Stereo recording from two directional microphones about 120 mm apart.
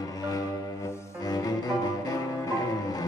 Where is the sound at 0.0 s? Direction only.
30° left (ahead or behind).